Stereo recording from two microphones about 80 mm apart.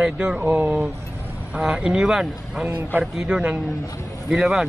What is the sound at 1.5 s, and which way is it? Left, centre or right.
A man's voice, centre.